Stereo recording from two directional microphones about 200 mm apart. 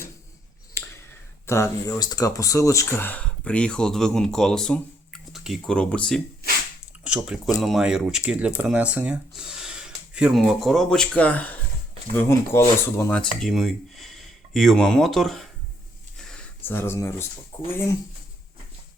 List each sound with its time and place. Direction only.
0.8 s clicking: 10° left (ahead or behind)
1.5 s speech: 15° left (ahead or behind)
16.1 s a sound: 5° left (ahead or behind)
17.7 s speech: 10° left (ahead or behind)